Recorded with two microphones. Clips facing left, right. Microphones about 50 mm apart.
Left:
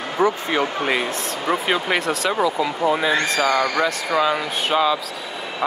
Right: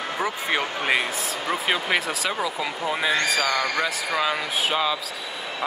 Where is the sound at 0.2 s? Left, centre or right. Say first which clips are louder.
Left 7 dB; centre.